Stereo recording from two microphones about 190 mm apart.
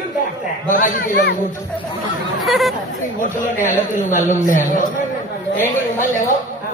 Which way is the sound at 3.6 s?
40° left (ahead or behind).